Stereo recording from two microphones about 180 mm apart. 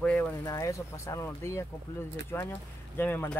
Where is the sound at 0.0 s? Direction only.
10° left (ahead or behind).